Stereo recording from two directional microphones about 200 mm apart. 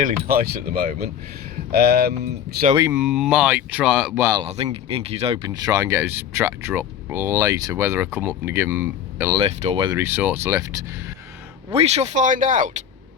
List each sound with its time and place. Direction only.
0.0 s speech: 45° right (ahead or behind)
2.9 s speech: 5° right (ahead or behind)
4.4 s speech: 30° right (ahead or behind)
5.5 s speech: 15° right (ahead or behind)
9.4 s speech: 30° right (ahead or behind)
10.0 s speech: 10° right (ahead or behind)
11.7 s speech: 30° right (ahead or behind)